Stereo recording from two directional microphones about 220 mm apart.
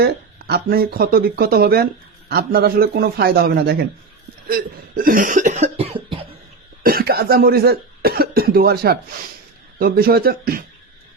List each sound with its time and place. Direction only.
0.0 s speech: 45° right (ahead or behind)
4.4 s cough: 40° right (ahead or behind)
6.8 s speech: 45° right (ahead or behind)